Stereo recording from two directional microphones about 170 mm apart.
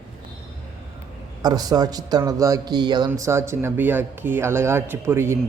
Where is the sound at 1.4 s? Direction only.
25° right (ahead or behind).